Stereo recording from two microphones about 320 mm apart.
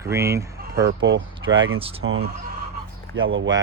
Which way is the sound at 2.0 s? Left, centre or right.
Right.